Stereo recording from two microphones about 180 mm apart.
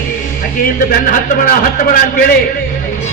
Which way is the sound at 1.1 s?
50° left (ahead or behind).